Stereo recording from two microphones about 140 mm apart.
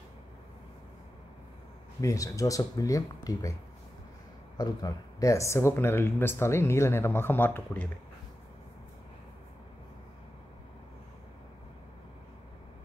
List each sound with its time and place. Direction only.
2.0 s speech: 25° left (ahead or behind)
4.6 s speech: 30° left (ahead or behind)